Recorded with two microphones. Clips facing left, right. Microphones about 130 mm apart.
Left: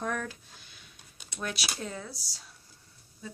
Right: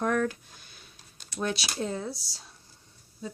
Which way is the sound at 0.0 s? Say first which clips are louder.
Right 7 dB; 55° right (ahead or behind).